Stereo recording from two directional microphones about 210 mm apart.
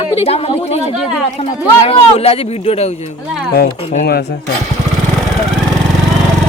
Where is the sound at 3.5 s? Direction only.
45° left (ahead or behind).